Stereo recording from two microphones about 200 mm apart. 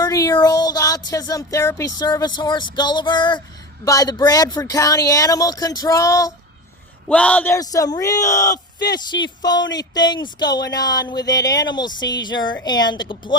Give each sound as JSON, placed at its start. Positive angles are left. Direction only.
{"t": 0.0, "sound": "speech", "side_deg": 20}
{"t": 7.1, "sound": "speech", "side_deg": 5}